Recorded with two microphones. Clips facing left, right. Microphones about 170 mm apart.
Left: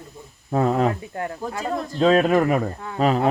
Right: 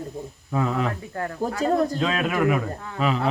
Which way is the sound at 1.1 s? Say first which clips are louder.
Left 1 dB; 20° left (ahead or behind).